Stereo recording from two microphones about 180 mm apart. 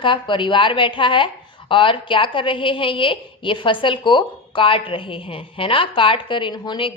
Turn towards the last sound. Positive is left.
turn(degrees=25)  # may be behind; listen again after turning